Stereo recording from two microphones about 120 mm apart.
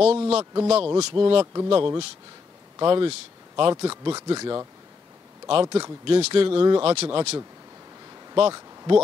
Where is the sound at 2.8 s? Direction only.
45° right (ahead or behind).